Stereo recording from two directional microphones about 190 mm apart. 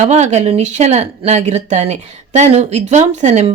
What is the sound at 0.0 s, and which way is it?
A woman's voice, 35° right (ahead or behind).